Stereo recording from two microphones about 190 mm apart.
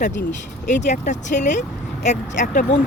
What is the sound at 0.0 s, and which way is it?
Speech, 40° left (ahead or behind).